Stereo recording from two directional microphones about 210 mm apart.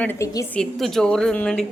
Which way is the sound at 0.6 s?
Centre (ahead or behind).